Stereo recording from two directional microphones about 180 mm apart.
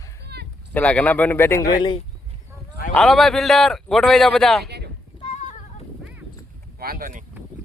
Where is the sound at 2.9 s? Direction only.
Centre (ahead or behind).